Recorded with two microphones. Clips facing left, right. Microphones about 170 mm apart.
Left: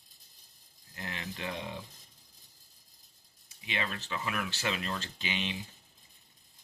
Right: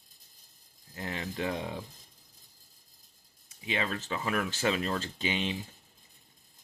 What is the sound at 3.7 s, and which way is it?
Speech, 35° right (ahead or behind).